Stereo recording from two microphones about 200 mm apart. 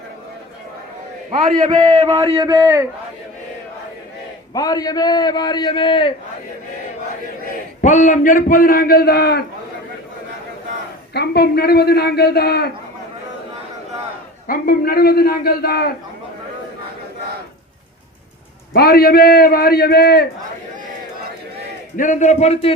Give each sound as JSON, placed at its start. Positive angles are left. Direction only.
{"t": 1.3, "sound": "a man's voice", "side_deg": -20}
{"t": 4.5, "sound": "a man's voice", "side_deg": 20}
{"t": 7.8, "sound": "a man's voice", "side_deg": 40}
{"t": 11.1, "sound": "a man's voice", "side_deg": 55}
{"t": 14.4, "sound": "a man's voice", "side_deg": 45}
{"t": 18.7, "sound": "a man's voice", "side_deg": 50}
{"t": 21.9, "sound": "a man's voice", "side_deg": 40}